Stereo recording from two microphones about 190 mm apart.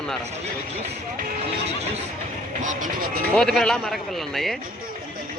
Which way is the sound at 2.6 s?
40° right (ahead or behind).